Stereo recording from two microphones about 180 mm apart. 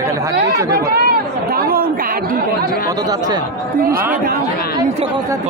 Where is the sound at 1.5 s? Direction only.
55° right (ahead or behind).